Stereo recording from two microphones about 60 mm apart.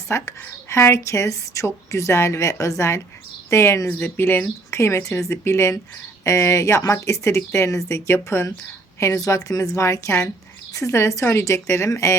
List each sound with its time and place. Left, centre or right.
0.1 s a woman's voice: left
3.5 s a woman's voice: left
4.7 s a woman's voice: left
9.0 s speech: left
9.7 s a woman's voice: left